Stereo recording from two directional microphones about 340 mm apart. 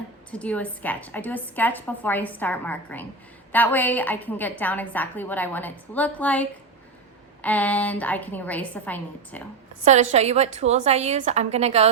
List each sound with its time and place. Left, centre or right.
0.3 s a woman's voice: centre
9.8 s a woman's voice: centre